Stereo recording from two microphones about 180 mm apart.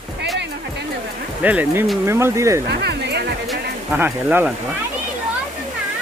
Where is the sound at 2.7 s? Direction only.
65° right (ahead or behind).